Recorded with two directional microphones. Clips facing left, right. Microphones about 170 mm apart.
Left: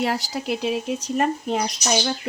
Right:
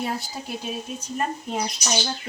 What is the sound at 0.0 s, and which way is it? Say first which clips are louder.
Speech: left 5 dB; 80° left.